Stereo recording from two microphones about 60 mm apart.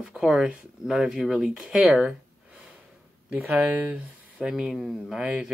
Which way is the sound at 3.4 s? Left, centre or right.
Centre.